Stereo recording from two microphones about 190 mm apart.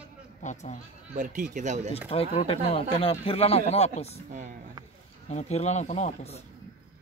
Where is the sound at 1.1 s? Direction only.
40° right (ahead or behind).